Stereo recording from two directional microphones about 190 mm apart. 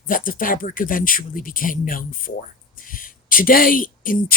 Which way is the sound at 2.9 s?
45° left (ahead or behind).